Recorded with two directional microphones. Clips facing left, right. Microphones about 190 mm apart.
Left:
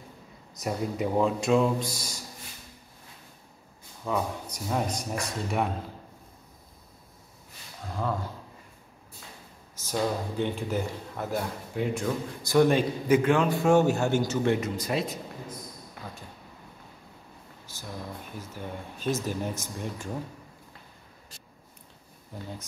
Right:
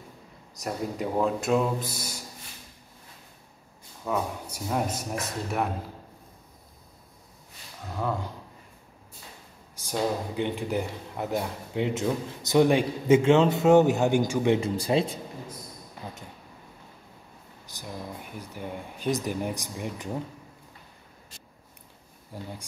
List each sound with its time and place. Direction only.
0.6 s speech: 5° left (ahead or behind)
4.0 s speech: 5° right (ahead or behind)
7.9 s speech: 10° right (ahead or behind)
9.8 s speech: 15° right (ahead or behind)
14.6 s speech: 30° right (ahead or behind)
17.6 s a sound: 15° right (ahead or behind)
18.4 s speech: 15° right (ahead or behind)